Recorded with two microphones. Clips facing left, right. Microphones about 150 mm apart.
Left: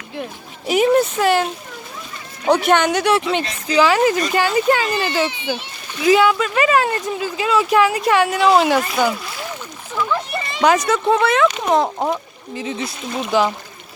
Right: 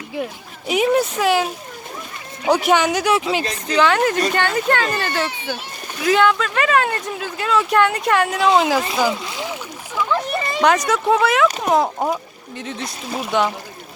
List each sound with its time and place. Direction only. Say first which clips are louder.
0.7 s speech: left 2 dB; centre (ahead or behind)
9.3 s splash: right 2 dB; 15° right (ahead or behind)
10.6 s speech: left 2 dB; 5° left (ahead or behind)
11.4 s speech: left 1 dB; 40° right (ahead or behind)
11.7 s speech: even; centre (ahead or behind)